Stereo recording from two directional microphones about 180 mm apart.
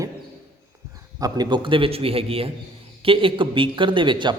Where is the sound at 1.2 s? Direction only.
25° right (ahead or behind).